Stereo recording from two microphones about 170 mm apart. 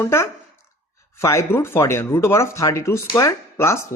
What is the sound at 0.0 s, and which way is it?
Speech, 15° left (ahead or behind).